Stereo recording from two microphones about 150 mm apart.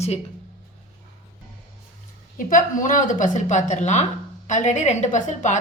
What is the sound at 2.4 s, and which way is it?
A woman's voice, 65° left (ahead or behind).